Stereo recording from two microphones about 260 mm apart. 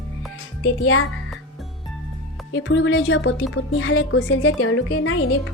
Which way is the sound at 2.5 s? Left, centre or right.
Left.